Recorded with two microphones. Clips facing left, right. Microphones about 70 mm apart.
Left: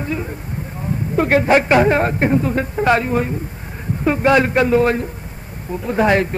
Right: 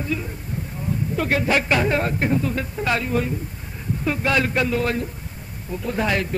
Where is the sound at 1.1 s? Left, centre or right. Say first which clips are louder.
Left 8 dB; left.